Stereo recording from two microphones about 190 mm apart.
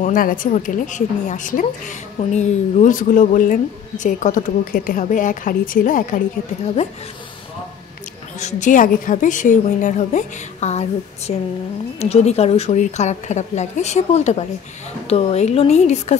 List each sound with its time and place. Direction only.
0.0 s a woman's voice: 45° left (ahead or behind)
8.4 s a woman's voice: 40° left (ahead or behind)